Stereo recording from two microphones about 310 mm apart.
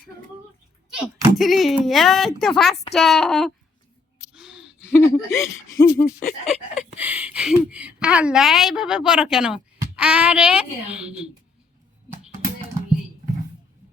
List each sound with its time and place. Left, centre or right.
1.2 s a woman's voice: centre
4.3 s a sound: centre
4.9 s speech: centre
6.1 s speech: left
6.9 s a woman's voice: centre